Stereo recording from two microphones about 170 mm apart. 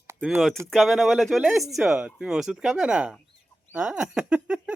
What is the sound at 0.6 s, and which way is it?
Speech, centre (ahead or behind).